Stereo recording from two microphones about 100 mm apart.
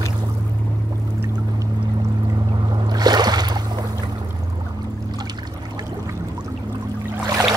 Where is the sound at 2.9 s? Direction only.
45° right (ahead or behind).